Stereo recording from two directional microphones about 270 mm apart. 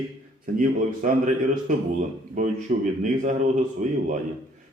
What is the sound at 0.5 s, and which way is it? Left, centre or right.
Speech, right.